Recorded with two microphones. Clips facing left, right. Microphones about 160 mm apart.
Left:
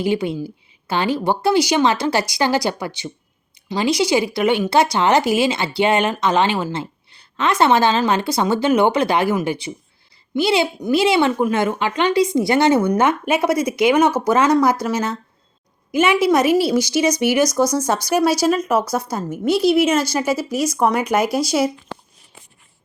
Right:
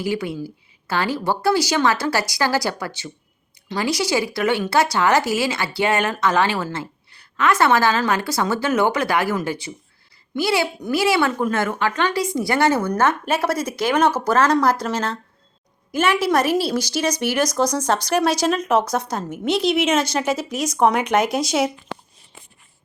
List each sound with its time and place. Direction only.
0.0 s speech: 20° left (ahead or behind); by 21.7 s centre (ahead or behind)